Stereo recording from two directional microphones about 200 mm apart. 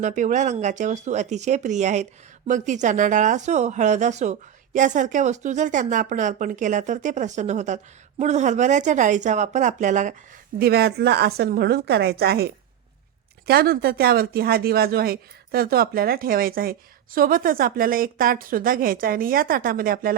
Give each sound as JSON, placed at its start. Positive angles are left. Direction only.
{"t": 0.0, "sound": "a woman's voice", "side_deg": -40}
{"t": 10.6, "sound": "speech", "side_deg": -50}
{"t": 13.5, "sound": "speech", "side_deg": -50}